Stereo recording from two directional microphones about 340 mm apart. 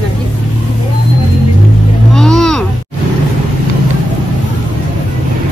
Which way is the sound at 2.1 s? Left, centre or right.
Centre.